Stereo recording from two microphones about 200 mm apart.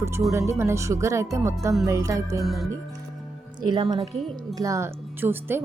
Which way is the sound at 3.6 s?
20° right (ahead or behind).